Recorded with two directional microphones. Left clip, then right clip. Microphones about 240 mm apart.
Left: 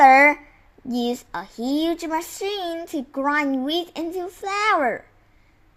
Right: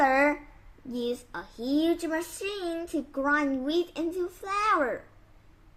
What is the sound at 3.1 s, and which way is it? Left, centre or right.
Speech, left.